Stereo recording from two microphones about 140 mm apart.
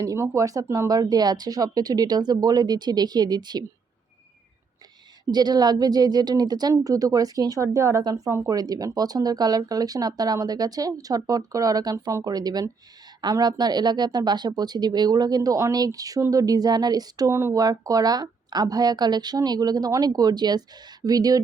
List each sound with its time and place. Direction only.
0.0 s speech: 25° right (ahead or behind)
5.3 s speech: 30° right (ahead or behind)